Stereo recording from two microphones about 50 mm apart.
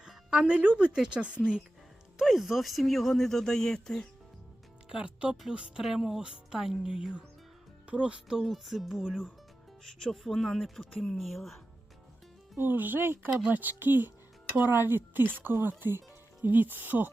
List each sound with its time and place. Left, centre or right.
0.1 s music: centre
0.4 s speech: right
2.1 s speech: centre
4.9 s speech: centre
5.8 s speech: centre
8.4 s speech: centre
12.5 s speech: right
13.0 s speech: right
13.5 s speech: right